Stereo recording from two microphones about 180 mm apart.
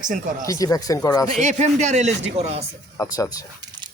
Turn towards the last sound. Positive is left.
turn(degrees=20)  # may be behind; listen again after turning